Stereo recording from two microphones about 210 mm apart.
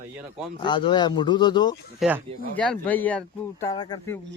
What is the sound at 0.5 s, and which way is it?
Speech, 20° left (ahead or behind).